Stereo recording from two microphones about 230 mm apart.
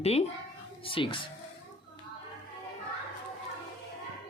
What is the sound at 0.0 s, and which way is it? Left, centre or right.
Speech, left.